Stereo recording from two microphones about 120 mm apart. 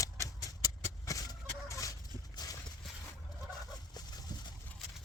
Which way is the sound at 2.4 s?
30° left (ahead or behind).